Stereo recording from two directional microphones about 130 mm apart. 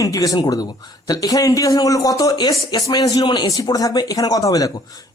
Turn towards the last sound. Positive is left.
turn(degrees=25)  # may be behind; listen again after turning